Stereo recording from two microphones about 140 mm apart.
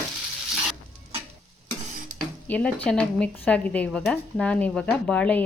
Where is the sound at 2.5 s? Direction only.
10° left (ahead or behind).